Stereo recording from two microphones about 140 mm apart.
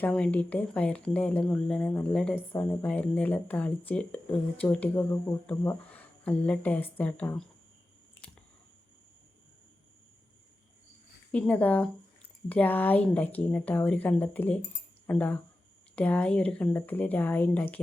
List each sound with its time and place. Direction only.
0.0 s speech: 10° left (ahead or behind)
11.3 s speech: 10° left (ahead or behind)